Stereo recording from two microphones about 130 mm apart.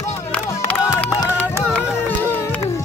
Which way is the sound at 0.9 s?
25° left (ahead or behind).